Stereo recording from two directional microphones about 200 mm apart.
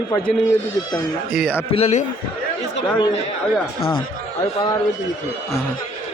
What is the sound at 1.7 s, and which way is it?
Speech, 30° left (ahead or behind).